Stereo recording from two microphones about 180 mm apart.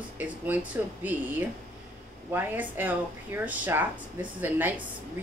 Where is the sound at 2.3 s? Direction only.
10° right (ahead or behind).